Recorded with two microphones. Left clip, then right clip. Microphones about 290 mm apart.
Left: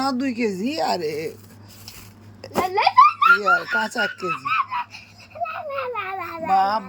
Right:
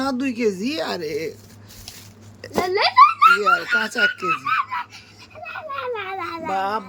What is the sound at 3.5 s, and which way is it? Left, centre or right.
Speech, centre.